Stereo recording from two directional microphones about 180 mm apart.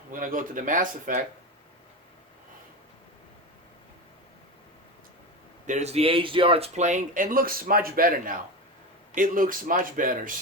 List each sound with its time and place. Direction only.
0.1 s speech: 50° right (ahead or behind)
5.6 s speech: 40° right (ahead or behind)